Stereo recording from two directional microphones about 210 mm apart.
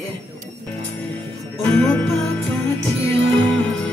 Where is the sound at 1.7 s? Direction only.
5° left (ahead or behind).